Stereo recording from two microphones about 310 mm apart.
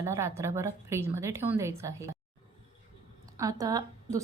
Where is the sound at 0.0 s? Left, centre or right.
Centre.